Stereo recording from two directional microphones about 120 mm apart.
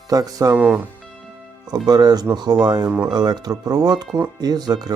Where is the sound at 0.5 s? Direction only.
10° right (ahead or behind).